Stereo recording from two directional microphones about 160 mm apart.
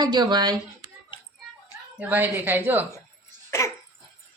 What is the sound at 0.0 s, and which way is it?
Speech, 25° right (ahead or behind).